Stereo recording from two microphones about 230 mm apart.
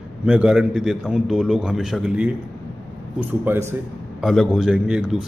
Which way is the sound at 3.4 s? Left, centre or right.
Centre.